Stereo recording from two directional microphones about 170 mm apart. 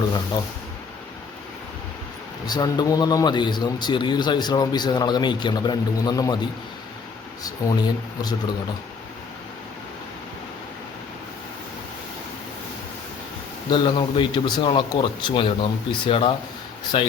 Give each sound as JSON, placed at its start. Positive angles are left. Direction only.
{"t": 2.5, "sound": "a man's voice", "side_deg": 25}
{"t": 7.4, "sound": "a man's voice", "side_deg": 20}
{"t": 13.7, "sound": "a man's voice", "side_deg": 30}